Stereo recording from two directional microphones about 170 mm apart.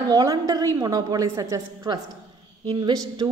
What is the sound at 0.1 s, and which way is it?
A woman's voice, 20° right (ahead or behind).